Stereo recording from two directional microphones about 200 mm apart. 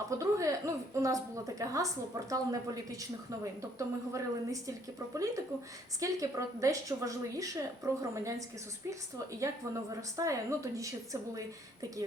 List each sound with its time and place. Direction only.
0.2 s a woman's voice: 15° right (ahead or behind)